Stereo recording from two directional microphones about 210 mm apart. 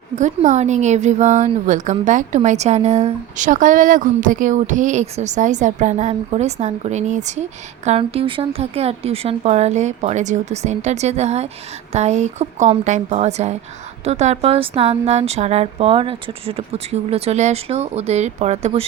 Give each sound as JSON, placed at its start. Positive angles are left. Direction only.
{"t": 0.2, "sound": "speech", "side_deg": -35}